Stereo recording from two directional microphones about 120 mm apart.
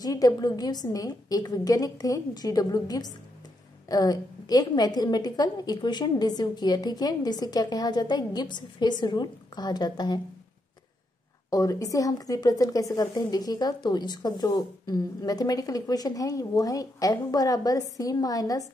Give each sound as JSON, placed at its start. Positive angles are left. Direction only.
{"t": 0.0, "sound": "a woman's voice", "side_deg": 30}
{"t": 11.5, "sound": "a woman's voice", "side_deg": 30}